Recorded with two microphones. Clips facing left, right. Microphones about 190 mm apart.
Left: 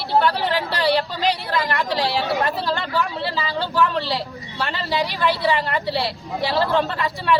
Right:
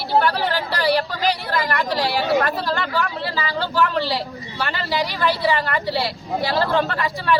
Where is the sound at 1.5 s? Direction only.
Centre (ahead or behind).